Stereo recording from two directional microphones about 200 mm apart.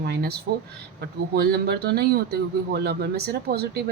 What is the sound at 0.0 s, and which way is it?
Speech, 50° right (ahead or behind).